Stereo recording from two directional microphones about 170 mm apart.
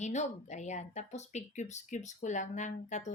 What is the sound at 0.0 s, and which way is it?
Speech, 45° left (ahead or behind).